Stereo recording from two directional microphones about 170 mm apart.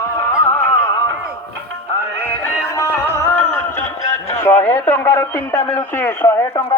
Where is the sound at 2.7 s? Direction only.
15° left (ahead or behind).